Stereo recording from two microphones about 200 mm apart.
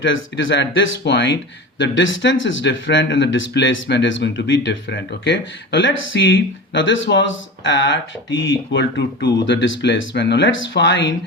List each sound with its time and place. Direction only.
0.0 s speech: 70° left (ahead or behind)